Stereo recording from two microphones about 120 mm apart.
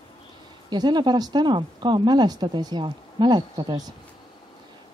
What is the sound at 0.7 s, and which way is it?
Speech, 40° right (ahead or behind).